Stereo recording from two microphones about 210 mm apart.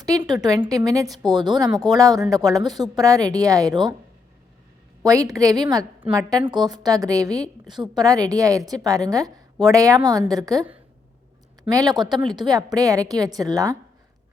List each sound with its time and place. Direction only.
0.0 s a woman's voice: 20° right (ahead or behind)
5.0 s a woman's voice: 15° right (ahead or behind)